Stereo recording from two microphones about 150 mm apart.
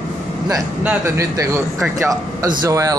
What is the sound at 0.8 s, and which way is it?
A man's voice, 15° right (ahead or behind).